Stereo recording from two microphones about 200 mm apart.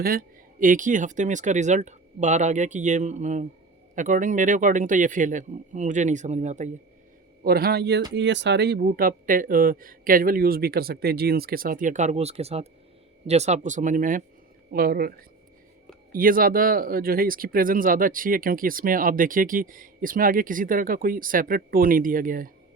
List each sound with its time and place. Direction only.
0.0 s speech: 45° right (ahead or behind)
7.4 s speech: 50° right (ahead or behind)
16.1 s speech: 45° right (ahead or behind)